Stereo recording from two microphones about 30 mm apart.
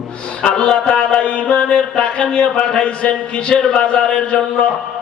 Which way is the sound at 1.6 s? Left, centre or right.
Left.